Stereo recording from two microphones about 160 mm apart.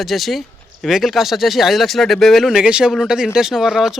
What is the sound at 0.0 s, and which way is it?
Speech, centre (ahead or behind).